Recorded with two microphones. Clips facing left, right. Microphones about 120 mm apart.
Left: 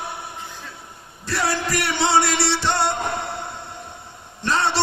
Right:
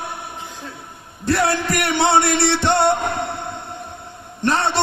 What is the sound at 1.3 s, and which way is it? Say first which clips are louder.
A man's voice: right 5 dB; 55° right (ahead or behind).